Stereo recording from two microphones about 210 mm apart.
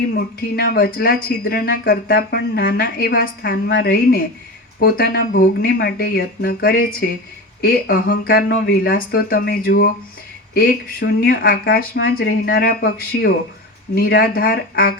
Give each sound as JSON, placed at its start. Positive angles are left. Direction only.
{"t": 0.2, "sound": "speech", "side_deg": 50}